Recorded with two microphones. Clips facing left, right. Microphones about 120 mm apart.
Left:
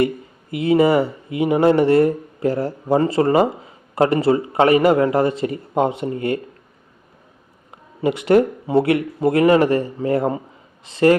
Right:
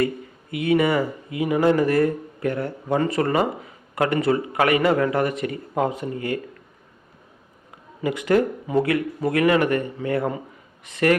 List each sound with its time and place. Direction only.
0.5 s speech: 30° left (ahead or behind)
8.0 s speech: 25° left (ahead or behind)